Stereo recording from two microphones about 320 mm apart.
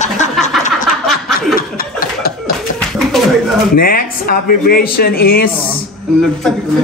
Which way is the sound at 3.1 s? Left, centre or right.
Centre.